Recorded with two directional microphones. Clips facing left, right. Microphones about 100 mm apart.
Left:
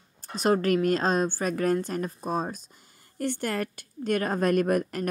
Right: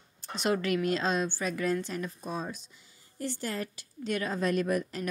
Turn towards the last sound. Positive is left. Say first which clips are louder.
# left 5 dB
turn(degrees=50)  # may be behind; listen again after turning